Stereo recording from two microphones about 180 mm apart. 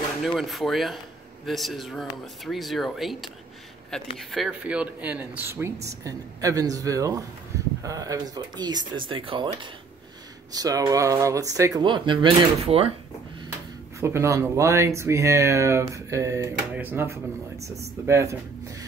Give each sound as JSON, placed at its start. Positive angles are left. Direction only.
{"t": 0.2, "sound": "speech", "side_deg": 0}
{"t": 13.9, "sound": "speech", "side_deg": -15}